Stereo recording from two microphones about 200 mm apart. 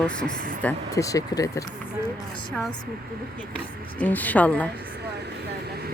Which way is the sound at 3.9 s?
10° left (ahead or behind).